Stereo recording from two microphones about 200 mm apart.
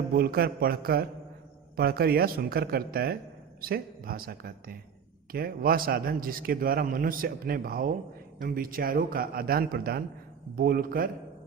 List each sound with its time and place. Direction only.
0.1 s a man's voice: 50° right (ahead or behind)